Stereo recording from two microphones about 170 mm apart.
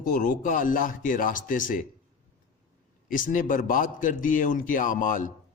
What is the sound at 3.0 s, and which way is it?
A man's voice, 55° left (ahead or behind).